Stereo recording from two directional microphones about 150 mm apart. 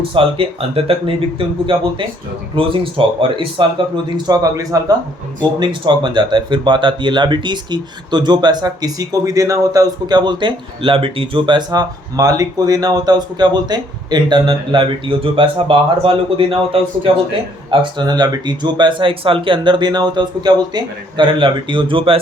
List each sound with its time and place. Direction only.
0.0 s speech: 35° right (ahead or behind)